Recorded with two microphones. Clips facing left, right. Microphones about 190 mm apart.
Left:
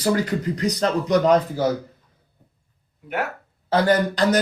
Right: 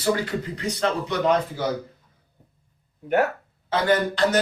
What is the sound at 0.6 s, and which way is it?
Speech, 40° left (ahead or behind).